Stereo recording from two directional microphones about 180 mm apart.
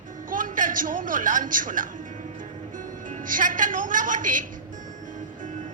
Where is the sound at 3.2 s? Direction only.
50° right (ahead or behind).